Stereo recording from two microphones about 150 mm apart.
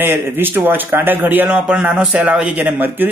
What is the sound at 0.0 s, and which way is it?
A man's voice, 15° right (ahead or behind).